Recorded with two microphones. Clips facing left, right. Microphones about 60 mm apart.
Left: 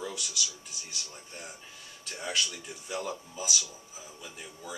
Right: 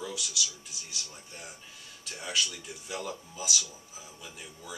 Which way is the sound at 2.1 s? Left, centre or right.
Centre.